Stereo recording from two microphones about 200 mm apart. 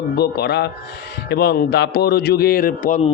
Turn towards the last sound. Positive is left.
turn(degrees=45)  # may be behind; listen again after turning